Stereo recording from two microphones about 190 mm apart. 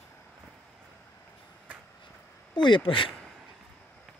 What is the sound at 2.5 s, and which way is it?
Speech, 25° left (ahead or behind).